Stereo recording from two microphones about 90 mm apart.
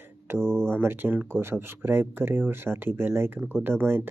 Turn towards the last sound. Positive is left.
turn(degrees=-25)  # may be behind; listen again after turning